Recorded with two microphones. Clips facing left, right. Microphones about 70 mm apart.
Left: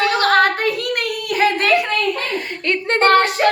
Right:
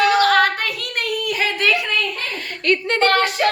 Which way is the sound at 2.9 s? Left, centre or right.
Left.